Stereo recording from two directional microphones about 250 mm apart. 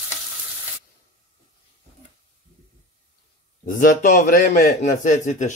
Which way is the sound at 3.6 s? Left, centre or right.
Left.